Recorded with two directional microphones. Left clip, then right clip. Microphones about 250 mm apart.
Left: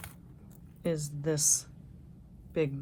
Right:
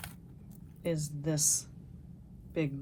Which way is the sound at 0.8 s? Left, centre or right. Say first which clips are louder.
Left 2 dB; left.